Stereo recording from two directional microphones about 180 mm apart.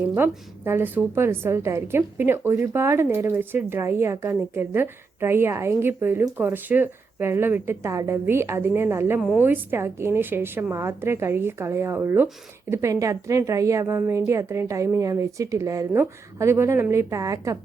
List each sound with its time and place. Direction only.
0.1 s a woman's voice: 15° right (ahead or behind)